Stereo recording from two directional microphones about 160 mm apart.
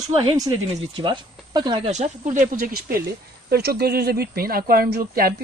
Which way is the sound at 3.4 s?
80° right.